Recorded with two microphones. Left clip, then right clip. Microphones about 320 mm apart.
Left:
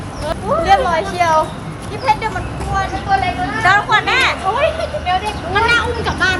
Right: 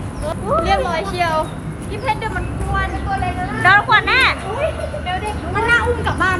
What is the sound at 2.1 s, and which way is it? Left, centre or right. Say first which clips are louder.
Speech: left 6 dB; centre.